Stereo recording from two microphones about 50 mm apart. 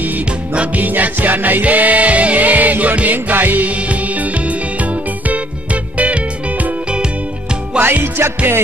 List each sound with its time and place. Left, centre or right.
0.6 s music: right
6.6 s music: right
7.8 s music: right